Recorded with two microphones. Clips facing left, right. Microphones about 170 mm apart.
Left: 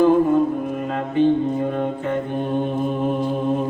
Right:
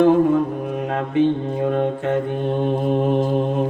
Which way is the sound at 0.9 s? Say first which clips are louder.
Even; 60° right (ahead or behind).